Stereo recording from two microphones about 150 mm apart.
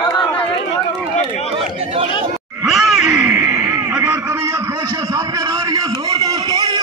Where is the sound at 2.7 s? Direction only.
Centre (ahead or behind).